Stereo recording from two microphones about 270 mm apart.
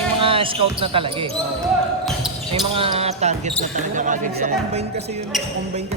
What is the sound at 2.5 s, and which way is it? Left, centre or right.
Speech, right.